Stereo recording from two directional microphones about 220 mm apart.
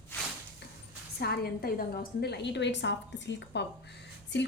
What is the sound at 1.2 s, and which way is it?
A woman's voice, 45° left (ahead or behind).